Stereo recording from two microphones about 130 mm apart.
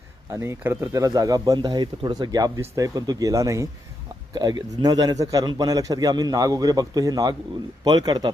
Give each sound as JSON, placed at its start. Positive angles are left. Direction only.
{"t": 0.3, "sound": "a man's voice", "side_deg": -20}